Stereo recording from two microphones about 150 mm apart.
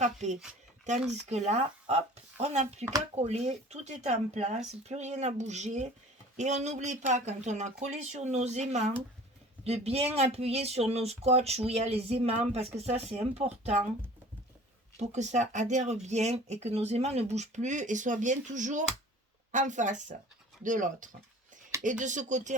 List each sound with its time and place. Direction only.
0.0 s speech: 50° right (ahead or behind)
14.9 s speech: 50° right (ahead or behind)